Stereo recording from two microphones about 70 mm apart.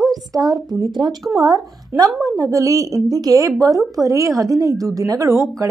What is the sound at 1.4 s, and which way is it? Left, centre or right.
A woman's voice, right.